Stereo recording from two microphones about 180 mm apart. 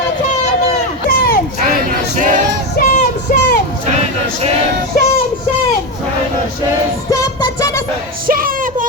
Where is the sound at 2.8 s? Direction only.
45° left (ahead or behind).